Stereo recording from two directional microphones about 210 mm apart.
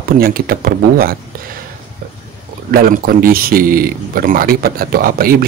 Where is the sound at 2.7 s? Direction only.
45° right (ahead or behind).